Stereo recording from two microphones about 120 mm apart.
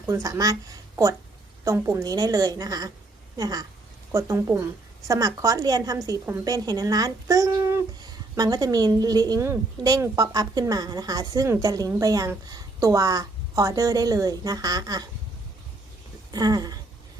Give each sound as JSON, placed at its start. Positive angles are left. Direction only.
{"t": 0.1, "sound": "a woman's voice", "side_deg": -30}
{"t": 16.3, "sound": "speech", "side_deg": -30}